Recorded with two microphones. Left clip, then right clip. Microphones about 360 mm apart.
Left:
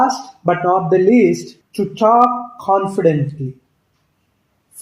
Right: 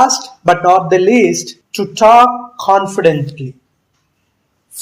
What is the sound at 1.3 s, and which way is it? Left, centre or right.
Speech, right.